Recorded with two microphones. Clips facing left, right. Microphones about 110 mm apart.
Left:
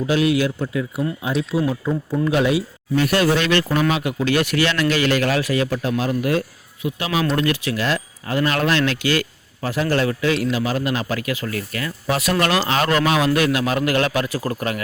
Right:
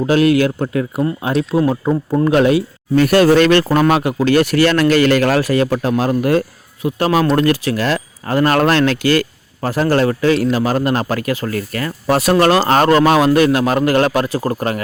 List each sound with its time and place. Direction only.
0.0 s speech: 55° right (ahead or behind)
4.0 s a man's voice: 45° right (ahead or behind)